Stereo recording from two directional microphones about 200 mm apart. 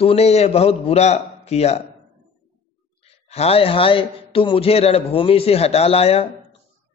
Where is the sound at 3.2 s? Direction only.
30° left (ahead or behind).